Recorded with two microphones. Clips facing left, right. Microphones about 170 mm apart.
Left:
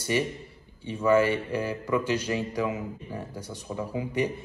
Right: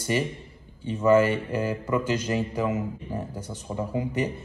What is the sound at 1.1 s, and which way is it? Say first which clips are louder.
Mantra: right 2 dB; 50° right (ahead or behind).